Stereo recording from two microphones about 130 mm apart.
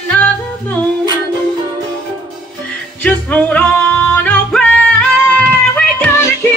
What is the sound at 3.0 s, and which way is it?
Yodeling, 10° left (ahead or behind).